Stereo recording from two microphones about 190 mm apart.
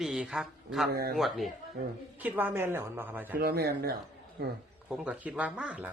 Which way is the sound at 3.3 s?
55° right (ahead or behind).